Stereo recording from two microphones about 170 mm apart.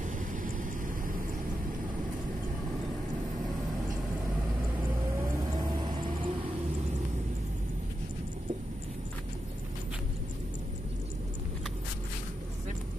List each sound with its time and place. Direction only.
0.0 s vehicle: 50° right (ahead or behind)
5.5 s vehicle: 25° right (ahead or behind)